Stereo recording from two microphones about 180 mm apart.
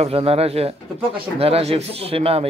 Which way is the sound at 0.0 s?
35° right (ahead or behind).